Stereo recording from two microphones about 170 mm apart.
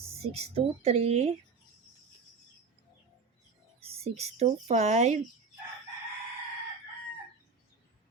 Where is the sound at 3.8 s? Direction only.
35° right (ahead or behind).